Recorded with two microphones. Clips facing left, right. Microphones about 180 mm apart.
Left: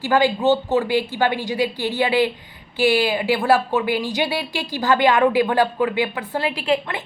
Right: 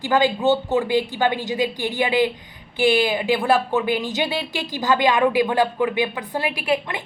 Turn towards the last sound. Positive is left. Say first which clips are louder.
# left 1 dB
turn(degrees=-15)  # may be behind; listen again after turning